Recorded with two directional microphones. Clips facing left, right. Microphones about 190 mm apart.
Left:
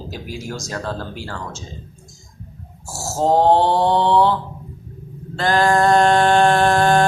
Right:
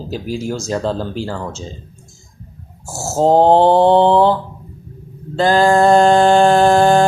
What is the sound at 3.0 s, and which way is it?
Mantra, 25° right (ahead or behind).